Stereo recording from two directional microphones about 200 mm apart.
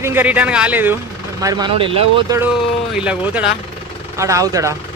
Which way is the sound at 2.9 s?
5° right (ahead or behind).